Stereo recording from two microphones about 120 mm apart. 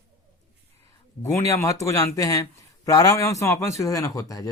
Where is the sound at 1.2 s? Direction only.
25° left (ahead or behind).